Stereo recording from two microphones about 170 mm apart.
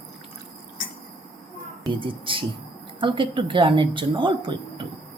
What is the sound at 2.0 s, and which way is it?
Speech, 30° right (ahead or behind).